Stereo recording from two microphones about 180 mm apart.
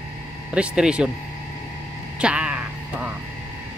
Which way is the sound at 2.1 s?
5° right (ahead or behind).